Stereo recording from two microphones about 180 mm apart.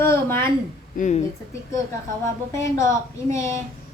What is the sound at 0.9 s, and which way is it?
Speech, 45° left (ahead or behind).